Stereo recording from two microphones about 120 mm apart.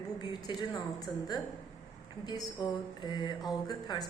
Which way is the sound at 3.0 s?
35° left (ahead or behind).